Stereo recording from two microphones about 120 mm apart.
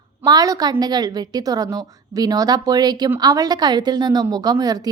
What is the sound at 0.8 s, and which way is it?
A woman's voice, 35° right (ahead or behind).